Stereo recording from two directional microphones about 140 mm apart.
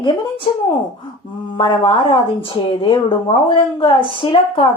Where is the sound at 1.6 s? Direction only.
35° left (ahead or behind).